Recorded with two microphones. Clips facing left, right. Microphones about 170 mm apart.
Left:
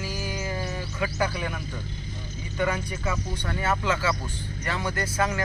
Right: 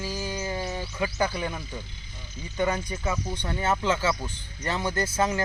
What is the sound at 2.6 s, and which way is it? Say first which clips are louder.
Speech: right 1 dB; 20° right (ahead or behind).